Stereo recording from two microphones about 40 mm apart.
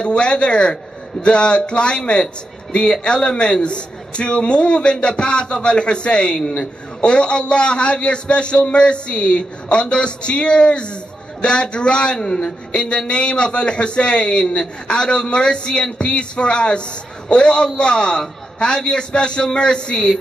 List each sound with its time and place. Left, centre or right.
0.0 s a man's voice: left